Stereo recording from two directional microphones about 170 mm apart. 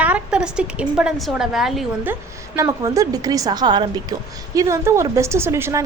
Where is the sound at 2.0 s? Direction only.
15° right (ahead or behind).